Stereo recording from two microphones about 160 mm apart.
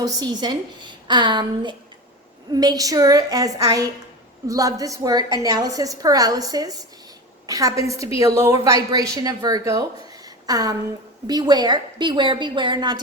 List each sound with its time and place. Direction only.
0.0 s a woman's voice: 25° right (ahead or behind)